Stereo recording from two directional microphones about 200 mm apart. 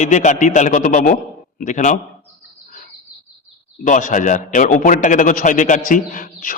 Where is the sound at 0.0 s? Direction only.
35° left (ahead or behind).